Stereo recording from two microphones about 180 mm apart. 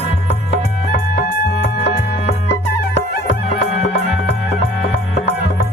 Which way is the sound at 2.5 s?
75° left (ahead or behind).